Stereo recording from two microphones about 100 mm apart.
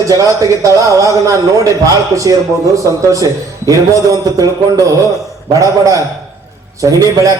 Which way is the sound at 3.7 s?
35° right (ahead or behind).